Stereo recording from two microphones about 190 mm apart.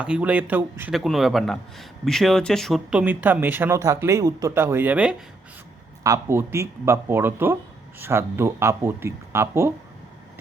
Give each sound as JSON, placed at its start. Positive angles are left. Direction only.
{"t": 0.0, "sound": "speech", "side_deg": -5}